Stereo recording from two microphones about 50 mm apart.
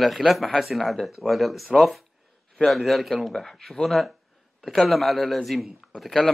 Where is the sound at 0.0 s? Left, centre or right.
Centre.